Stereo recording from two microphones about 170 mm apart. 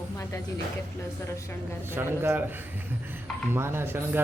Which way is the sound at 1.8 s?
15° right (ahead or behind).